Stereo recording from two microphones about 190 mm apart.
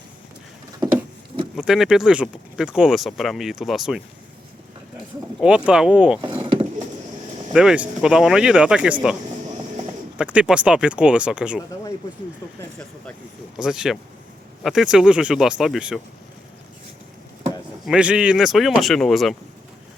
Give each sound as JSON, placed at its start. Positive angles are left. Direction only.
{"t": 1.5, "sound": "speech", "side_deg": 0}
{"t": 5.4, "sound": "speech", "side_deg": -5}
{"t": 6.4, "sound": "vehicle", "side_deg": -30}
{"t": 7.5, "sound": "speech", "side_deg": -5}
{"t": 10.2, "sound": "speech", "side_deg": -5}
{"t": 13.6, "sound": "speech", "side_deg": -5}
{"t": 17.8, "sound": "speech", "side_deg": -5}